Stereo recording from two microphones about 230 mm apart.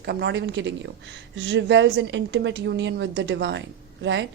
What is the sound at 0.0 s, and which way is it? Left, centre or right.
A woman's voice, right.